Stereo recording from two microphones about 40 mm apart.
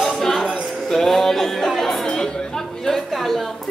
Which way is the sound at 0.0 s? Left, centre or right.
Centre.